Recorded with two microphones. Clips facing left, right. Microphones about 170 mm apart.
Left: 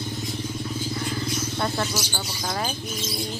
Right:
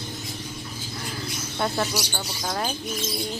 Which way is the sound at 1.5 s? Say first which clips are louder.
Right 3 dB; 5° right (ahead or behind).